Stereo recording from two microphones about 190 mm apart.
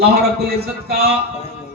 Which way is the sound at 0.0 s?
55° right (ahead or behind).